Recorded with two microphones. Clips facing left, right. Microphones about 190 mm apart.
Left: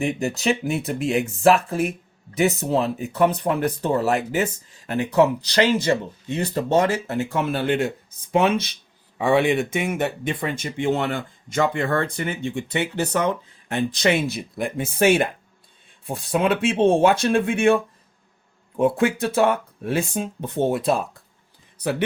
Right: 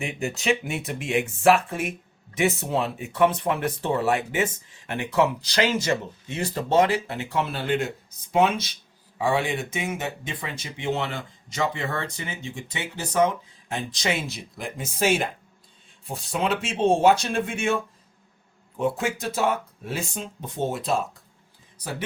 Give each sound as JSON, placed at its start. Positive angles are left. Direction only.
{"t": 0.0, "sound": "speech", "side_deg": 40}
{"t": 18.8, "sound": "speech", "side_deg": 55}